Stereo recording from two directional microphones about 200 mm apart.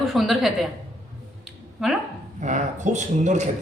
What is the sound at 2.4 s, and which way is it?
Speech, 35° right (ahead or behind).